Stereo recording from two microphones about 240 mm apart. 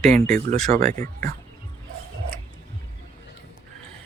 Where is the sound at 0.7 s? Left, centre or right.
Right.